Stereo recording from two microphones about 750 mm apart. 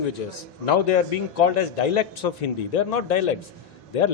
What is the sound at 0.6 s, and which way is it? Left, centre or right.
A man's voice, left.